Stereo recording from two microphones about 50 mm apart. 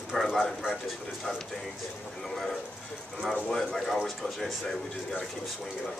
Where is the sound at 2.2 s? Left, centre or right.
Centre.